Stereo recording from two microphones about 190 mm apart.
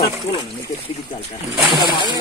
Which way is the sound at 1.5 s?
Centre (ahead or behind).